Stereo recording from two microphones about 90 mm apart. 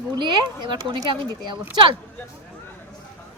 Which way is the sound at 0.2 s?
60° right (ahead or behind).